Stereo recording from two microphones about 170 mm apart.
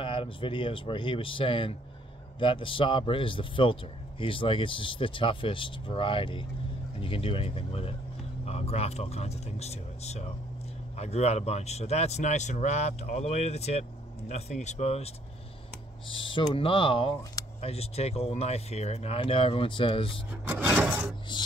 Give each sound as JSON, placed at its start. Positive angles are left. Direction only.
{"t": 0.0, "sound": "speech", "side_deg": 30}
{"t": 16.1, "sound": "speech", "side_deg": 30}
{"t": 20.4, "sound": "a sound", "side_deg": -5}